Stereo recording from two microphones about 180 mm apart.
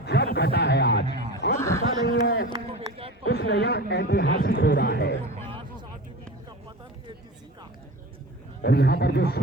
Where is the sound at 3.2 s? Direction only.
70° left (ahead or behind).